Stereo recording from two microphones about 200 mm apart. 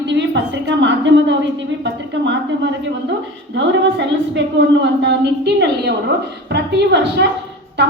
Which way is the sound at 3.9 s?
60° right (ahead or behind).